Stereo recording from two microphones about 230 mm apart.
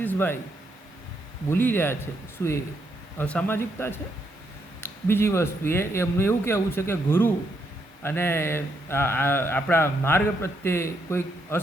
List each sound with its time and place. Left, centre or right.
0.0 s speech: centre
1.5 s speech: centre